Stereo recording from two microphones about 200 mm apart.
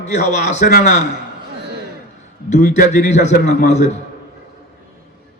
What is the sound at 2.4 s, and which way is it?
A man's voice, 35° left (ahead or behind).